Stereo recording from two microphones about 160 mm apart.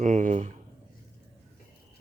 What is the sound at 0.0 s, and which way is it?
Speech, 50° right (ahead or behind).